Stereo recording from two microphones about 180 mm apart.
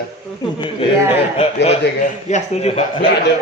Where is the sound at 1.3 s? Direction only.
35° left (ahead or behind).